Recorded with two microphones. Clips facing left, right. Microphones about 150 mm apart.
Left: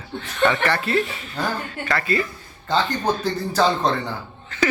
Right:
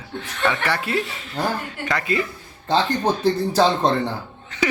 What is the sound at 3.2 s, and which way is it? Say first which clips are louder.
Speech: right 4 dB; 30° right (ahead or behind).